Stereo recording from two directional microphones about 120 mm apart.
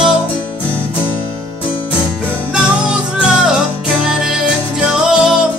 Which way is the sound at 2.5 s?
5° right (ahead or behind).